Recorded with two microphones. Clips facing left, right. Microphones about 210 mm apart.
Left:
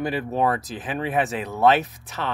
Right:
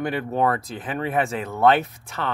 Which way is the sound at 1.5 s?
Centre (ahead or behind).